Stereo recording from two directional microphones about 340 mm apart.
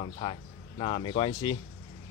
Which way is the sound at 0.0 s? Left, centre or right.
Centre.